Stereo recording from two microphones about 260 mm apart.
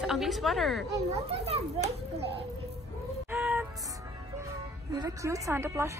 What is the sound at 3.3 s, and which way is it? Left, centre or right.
Music, centre.